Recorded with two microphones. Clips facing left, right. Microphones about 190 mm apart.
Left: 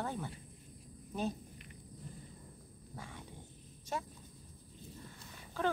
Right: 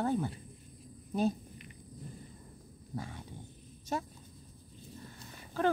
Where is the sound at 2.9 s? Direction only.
40° right (ahead or behind).